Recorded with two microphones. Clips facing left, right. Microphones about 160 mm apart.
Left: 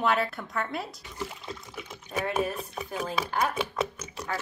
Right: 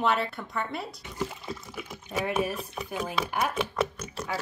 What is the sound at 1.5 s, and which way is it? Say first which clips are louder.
Water: right 2 dB; 5° right (ahead or behind).